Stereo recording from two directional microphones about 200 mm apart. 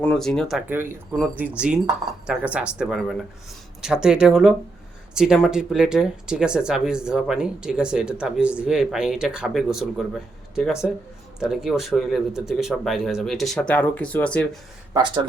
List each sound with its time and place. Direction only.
0.0 s speech: 5° left (ahead or behind)
14.9 s speech: 25° right (ahead or behind)